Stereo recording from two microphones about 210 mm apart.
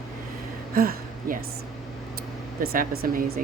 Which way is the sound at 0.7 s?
45° right (ahead or behind).